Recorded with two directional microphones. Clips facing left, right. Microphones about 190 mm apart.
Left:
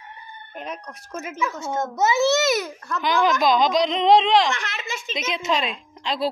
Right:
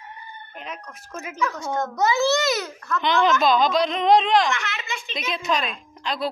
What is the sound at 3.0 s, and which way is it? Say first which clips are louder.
Speech: even; 10° left (ahead or behind).